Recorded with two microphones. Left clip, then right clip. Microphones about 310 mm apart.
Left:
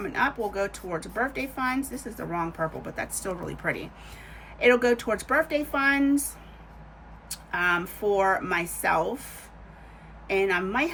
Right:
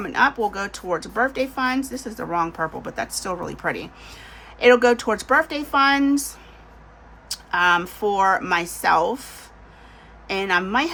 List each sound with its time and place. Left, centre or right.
0.0 s a woman's voice: centre
7.5 s a woman's voice: centre
10.2 s a woman's voice: centre